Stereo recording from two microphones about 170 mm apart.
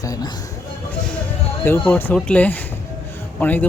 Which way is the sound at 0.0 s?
20° left (ahead or behind).